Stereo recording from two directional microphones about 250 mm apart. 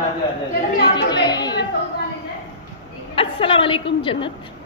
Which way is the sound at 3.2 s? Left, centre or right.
Left.